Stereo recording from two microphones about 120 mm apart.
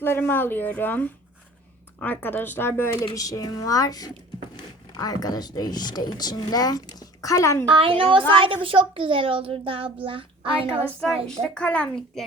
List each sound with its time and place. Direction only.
0.0 s speech: 20° left (ahead or behind)
3.2 s speech: 30° left (ahead or behind)
7.7 s a child's voice: 45° right (ahead or behind)
11.4 s speech: 10° left (ahead or behind)